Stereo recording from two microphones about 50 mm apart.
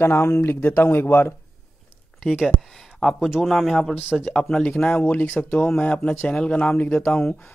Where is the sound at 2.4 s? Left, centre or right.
Centre.